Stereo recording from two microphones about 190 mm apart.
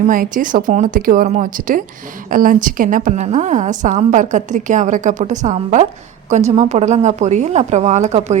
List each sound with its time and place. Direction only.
0.1 s a woman's voice: 45° right (ahead or behind)